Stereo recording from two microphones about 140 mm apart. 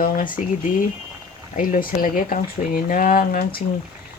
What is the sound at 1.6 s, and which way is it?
A woman's voice, 90° left.